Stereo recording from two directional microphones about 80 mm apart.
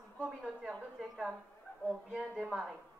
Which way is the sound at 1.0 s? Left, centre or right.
Centre.